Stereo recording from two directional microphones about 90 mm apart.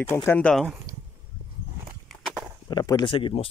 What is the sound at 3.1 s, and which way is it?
Speech, 75° left (ahead or behind).